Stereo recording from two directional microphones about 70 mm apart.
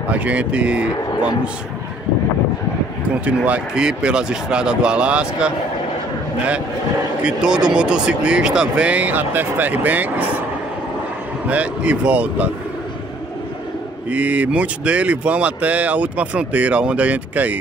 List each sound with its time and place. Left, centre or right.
0.1 s speech: centre
3.3 s speech: centre
7.2 s speech: centre
11.4 s speech: centre
14.1 s speech: right